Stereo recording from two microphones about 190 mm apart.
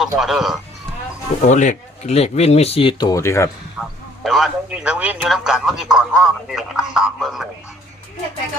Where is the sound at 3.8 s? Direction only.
Centre (ahead or behind).